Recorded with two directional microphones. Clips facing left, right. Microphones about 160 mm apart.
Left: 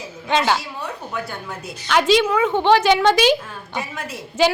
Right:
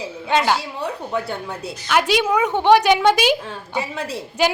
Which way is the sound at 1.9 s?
10° right (ahead or behind).